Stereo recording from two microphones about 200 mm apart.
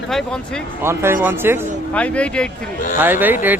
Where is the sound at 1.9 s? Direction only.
5° left (ahead or behind).